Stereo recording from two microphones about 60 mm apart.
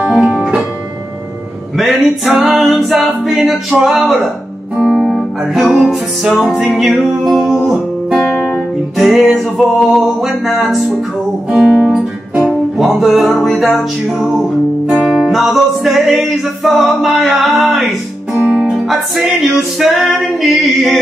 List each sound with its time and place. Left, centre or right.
1.8 s music: centre
11.5 s music: centre
12.7 s music: centre
18.3 s music: right
18.7 s music: centre